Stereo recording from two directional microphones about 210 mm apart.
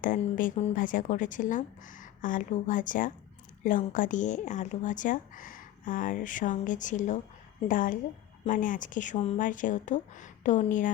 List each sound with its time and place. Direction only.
0.0 s speech: 40° left (ahead or behind)